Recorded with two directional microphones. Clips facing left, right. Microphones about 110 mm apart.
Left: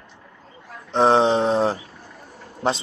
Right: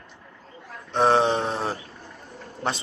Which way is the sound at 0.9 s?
25° left (ahead or behind).